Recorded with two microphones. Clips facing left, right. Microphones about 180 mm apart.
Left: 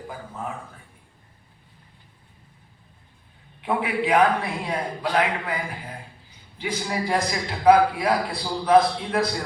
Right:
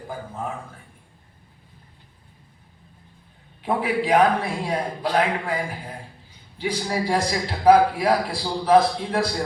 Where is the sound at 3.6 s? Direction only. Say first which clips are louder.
Right 1 dB; 35° right (ahead or behind).